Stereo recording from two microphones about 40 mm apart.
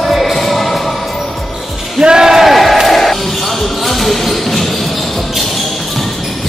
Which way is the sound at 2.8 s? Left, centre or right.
Centre.